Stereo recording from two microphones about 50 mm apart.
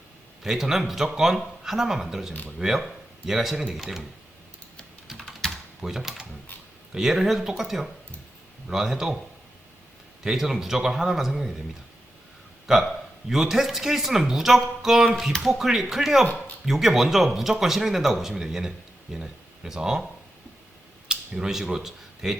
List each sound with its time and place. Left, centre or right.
0.4 s speech: centre
5.8 s speech: centre
10.2 s speech: centre
12.7 s speech: centre
16.2 s speech: left
16.6 s speech: centre
21.1 s speech: centre